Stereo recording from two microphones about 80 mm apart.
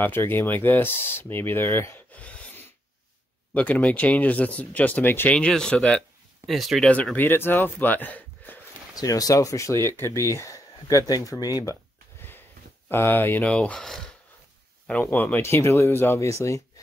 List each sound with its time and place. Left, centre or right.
0.0 s speech: left
2.1 s a sound: centre
3.5 s speech: centre
5.5 s speech: centre
6.4 s speech: centre
6.8 s speech: centre
7.2 s speech: left
8.9 s speech: left
12.9 s speech: left
13.5 s speech: centre
14.9 s speech: centre; by 16.6 s left